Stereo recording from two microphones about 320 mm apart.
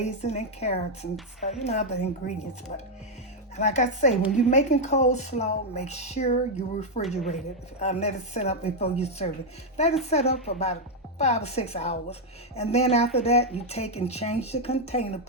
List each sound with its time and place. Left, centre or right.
0.0 s a woman's voice: left
3.6 s a woman's voice: left